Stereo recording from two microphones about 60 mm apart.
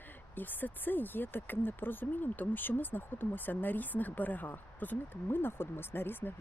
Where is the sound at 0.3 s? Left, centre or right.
Left.